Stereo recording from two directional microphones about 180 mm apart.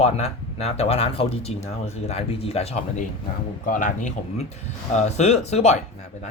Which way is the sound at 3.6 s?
45° left (ahead or behind).